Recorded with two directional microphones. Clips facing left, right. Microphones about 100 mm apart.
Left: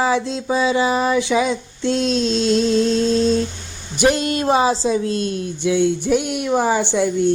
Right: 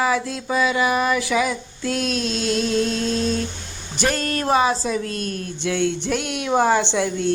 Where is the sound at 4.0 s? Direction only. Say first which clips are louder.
Left 5 dB; 15° left (ahead or behind).